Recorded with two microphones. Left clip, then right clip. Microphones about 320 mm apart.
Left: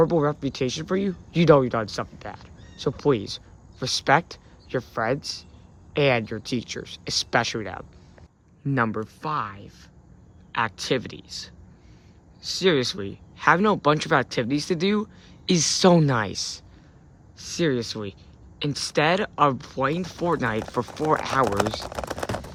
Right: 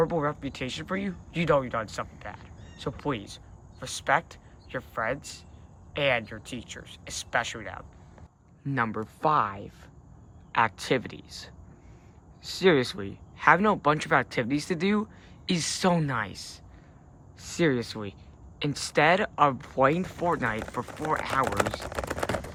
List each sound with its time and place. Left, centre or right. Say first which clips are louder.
0.0 s speech: left 6 dB; centre